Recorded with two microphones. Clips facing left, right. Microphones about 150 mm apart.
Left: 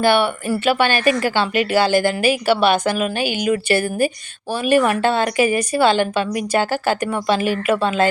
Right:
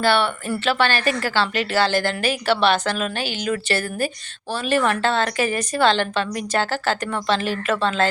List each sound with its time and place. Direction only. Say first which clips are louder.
0.0 s a woman's voice: left 3 dB; 15° left (ahead or behind)